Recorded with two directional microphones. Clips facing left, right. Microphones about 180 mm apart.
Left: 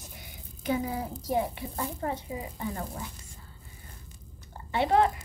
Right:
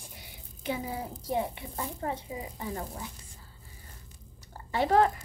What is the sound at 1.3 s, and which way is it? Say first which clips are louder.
Speech: left 2 dB; 25° right (ahead or behind).